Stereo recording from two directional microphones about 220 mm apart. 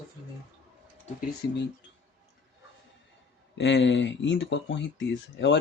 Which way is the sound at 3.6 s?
55° left (ahead or behind).